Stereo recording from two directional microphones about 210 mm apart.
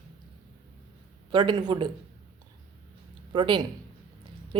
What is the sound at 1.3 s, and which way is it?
Speech, 20° right (ahead or behind).